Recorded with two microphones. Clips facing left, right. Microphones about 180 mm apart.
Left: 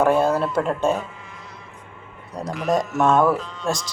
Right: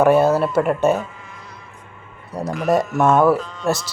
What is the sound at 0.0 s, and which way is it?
Speech, 5° right (ahead or behind).